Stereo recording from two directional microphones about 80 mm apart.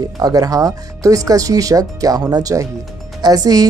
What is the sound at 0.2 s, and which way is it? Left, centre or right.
Speech, right.